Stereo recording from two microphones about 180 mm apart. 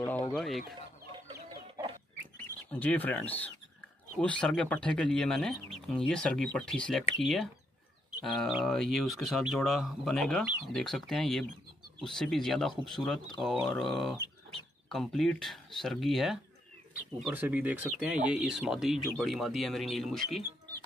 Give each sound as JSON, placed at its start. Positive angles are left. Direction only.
{"t": 0.0, "sound": "a sound", "side_deg": 15}
{"t": 1.3, "sound": "chicken", "side_deg": -25}
{"t": 2.7, "sound": "speech", "side_deg": 10}
{"t": 8.3, "sound": "speech", "side_deg": 0}
{"t": 10.4, "sound": "speech", "side_deg": -10}
{"t": 10.8, "sound": "speech", "side_deg": 5}